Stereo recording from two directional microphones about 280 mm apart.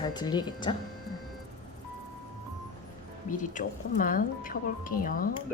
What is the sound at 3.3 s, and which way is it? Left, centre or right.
Speech, left.